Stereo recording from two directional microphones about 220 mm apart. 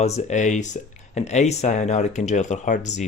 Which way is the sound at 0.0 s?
30° left (ahead or behind).